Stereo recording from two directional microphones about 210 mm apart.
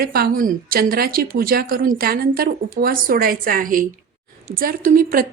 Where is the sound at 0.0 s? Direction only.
45° right (ahead or behind).